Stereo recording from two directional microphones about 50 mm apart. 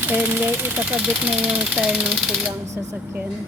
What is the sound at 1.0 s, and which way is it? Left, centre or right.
Speech, centre.